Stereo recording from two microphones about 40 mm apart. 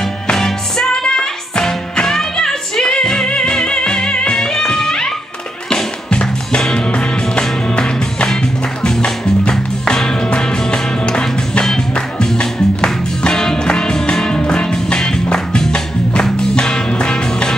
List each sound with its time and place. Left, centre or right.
0.3 s music: centre